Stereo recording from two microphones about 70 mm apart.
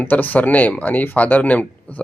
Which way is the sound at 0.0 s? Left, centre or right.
Left.